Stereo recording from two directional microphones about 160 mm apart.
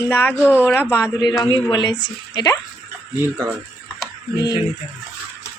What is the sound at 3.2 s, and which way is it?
Speech, 15° right (ahead or behind).